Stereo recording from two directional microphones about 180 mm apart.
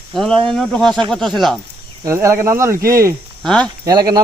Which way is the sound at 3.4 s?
5° left (ahead or behind).